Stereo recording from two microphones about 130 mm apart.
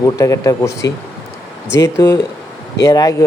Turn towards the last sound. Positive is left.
turn(degrees=30)  # may be behind; listen again after turning